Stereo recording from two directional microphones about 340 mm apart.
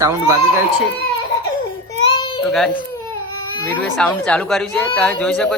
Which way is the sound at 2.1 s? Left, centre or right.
Centre.